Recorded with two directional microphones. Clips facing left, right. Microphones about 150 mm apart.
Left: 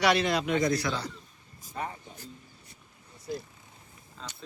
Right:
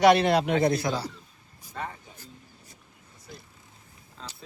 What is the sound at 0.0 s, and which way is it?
Speech, 55° right (ahead or behind).